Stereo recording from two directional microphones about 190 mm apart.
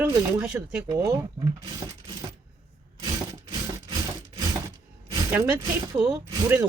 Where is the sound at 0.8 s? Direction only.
20° right (ahead or behind).